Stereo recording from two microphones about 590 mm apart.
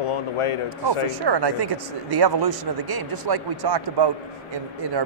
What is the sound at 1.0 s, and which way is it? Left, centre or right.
Speech, right.